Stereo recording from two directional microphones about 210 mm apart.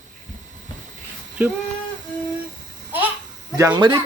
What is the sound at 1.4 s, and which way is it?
Speech, 10° right (ahead or behind).